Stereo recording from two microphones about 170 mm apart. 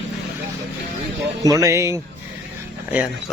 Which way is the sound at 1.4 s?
20° right (ahead or behind).